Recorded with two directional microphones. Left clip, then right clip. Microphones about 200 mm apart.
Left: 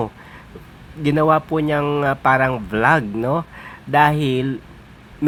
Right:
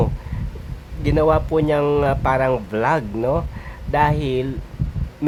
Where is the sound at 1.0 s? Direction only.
5° left (ahead or behind).